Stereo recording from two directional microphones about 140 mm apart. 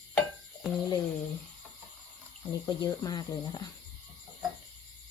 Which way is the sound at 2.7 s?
30° left (ahead or behind).